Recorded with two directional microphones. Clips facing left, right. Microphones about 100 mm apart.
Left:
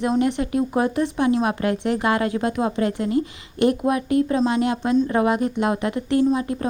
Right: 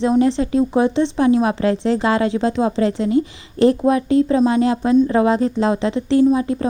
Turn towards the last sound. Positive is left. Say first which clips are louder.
# right 5 dB
turn(degrees=-25)  # may be behind; listen again after turning